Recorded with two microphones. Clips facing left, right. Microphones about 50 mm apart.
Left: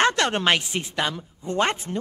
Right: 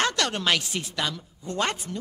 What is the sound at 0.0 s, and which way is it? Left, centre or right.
A woman's voice, left.